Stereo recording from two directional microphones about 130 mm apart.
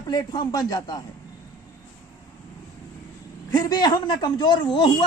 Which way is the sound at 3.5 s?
30° left (ahead or behind).